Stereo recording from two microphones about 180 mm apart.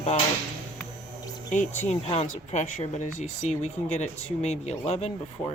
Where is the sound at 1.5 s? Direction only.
40° left (ahead or behind).